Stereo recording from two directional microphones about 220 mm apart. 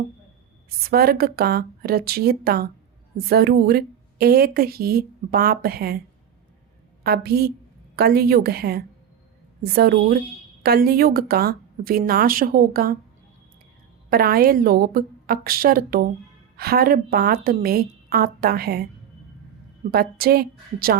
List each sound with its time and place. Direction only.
0.9 s speech: 45° right (ahead or behind)
7.0 s speech: 45° right (ahead or behind)
14.1 s speech: 45° right (ahead or behind)
19.9 s speech: 45° right (ahead or behind)